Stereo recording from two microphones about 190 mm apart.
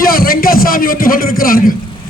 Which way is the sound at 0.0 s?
50° left (ahead or behind).